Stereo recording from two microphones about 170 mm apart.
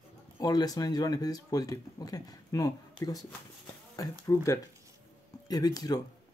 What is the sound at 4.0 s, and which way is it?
Speech, 20° left (ahead or behind).